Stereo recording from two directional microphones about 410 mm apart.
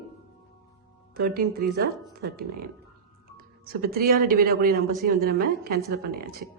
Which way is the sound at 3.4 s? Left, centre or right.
Right.